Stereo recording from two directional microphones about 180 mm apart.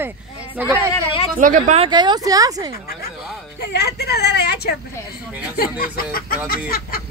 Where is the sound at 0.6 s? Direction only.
10° right (ahead or behind).